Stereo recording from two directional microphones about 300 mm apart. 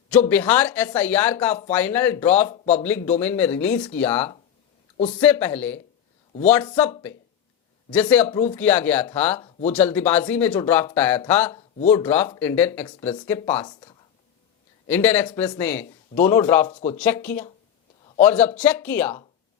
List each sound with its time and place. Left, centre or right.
0.3 s speech: centre
8.0 s speech: centre
14.8 s speech: centre
16.7 s speech: left
17.0 s speech: centre